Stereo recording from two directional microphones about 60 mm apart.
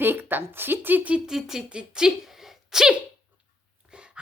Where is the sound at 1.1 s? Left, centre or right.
Centre.